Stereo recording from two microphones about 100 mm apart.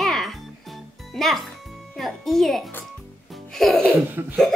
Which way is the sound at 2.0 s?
Centre (ahead or behind).